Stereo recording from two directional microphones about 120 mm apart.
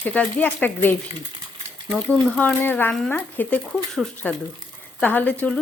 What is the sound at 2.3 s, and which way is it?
Speech, 10° left (ahead or behind).